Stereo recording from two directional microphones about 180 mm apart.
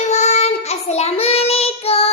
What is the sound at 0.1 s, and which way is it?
Child singing, 40° left (ahead or behind).